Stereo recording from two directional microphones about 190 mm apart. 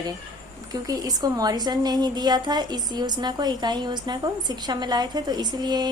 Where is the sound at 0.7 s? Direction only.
20° right (ahead or behind).